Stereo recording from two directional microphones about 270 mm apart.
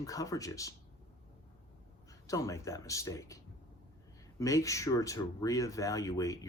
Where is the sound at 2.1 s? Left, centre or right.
Centre.